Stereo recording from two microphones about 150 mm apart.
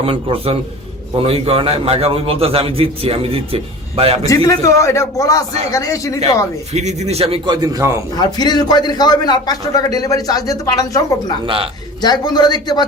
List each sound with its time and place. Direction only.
0.0 s a man's voice: 40° right (ahead or behind)
4.4 s a man's voice: 20° left (ahead or behind)
6.7 s speech: 45° right (ahead or behind)
7.4 s a man's voice: 25° right (ahead or behind)
8.1 s a man's voice: 25° left (ahead or behind)
11.4 s a man's voice: 35° right (ahead or behind)
12.0 s a man's voice: 25° left (ahead or behind)